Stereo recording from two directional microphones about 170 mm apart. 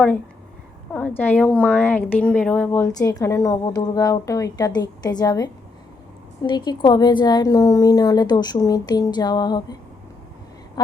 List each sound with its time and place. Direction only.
0.9 s a woman's voice: 10° left (ahead or behind)
2.8 s a woman's voice: 20° left (ahead or behind)